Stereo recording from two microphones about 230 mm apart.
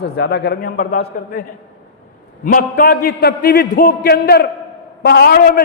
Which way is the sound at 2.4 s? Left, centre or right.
Left.